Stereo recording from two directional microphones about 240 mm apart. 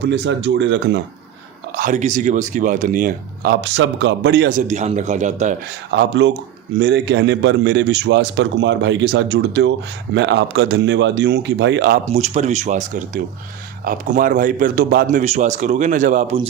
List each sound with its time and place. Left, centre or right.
0.0 s a man's voice: right
1.7 s speech: right
5.9 s a man's voice: right
12.0 s speech: right